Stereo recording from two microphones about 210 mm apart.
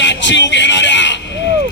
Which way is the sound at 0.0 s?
60° left (ahead or behind).